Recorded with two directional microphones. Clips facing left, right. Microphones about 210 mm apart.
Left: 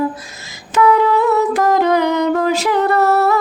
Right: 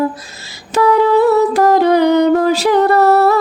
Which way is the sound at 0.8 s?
35° right (ahead or behind).